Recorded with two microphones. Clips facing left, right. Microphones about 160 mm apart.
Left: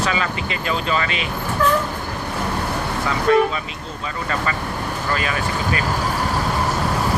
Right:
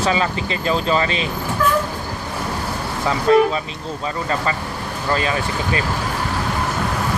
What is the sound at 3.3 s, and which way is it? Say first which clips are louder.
Speech: right 2 dB; 25° right (ahead or behind).